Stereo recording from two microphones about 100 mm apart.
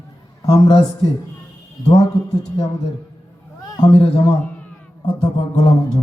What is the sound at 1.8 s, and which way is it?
Speech, 90° left.